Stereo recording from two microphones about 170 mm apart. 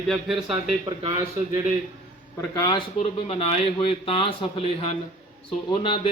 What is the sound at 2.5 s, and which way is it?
Speech, 25° left (ahead or behind).